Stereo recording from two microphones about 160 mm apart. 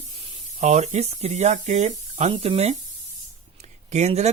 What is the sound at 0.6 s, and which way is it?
Speech, 45° right (ahead or behind).